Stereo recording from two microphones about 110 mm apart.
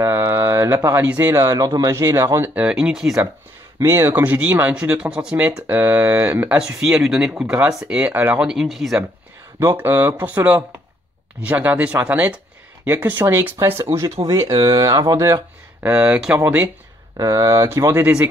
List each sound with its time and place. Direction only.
0.1 s speech: 25° right (ahead or behind)
1.3 s speech: 30° right (ahead or behind)
2.5 s speech: 10° right (ahead or behind)
3.8 s speech: 20° right (ahead or behind)
6.6 s speech: 5° right (ahead or behind)
8.5 s speech: centre (ahead or behind)
9.6 s speech: 25° right (ahead or behind)
14.2 s speech: 45° right (ahead or behind)
15.8 s speech: 15° right (ahead or behind)
17.2 s speech: 30° right (ahead or behind)